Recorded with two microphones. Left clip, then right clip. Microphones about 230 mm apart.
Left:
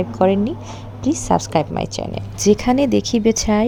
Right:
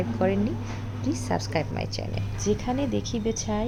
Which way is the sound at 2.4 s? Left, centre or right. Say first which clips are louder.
Left 12 dB; left.